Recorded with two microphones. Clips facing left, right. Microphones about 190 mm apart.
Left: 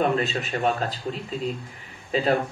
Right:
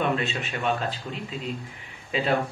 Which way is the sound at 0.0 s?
40° left (ahead or behind).